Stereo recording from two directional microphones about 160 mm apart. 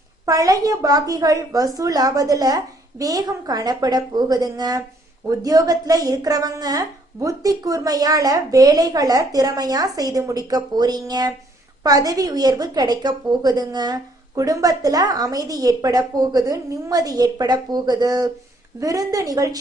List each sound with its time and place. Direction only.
0.3 s a woman's voice: 20° right (ahead or behind)